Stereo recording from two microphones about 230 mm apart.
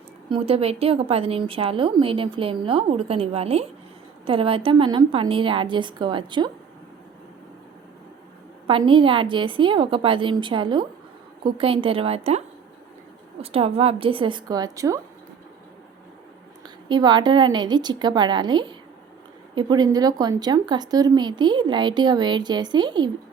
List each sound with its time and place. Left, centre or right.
0.3 s speech: right
8.6 s speech: right
13.4 s speech: right
16.9 s speech: centre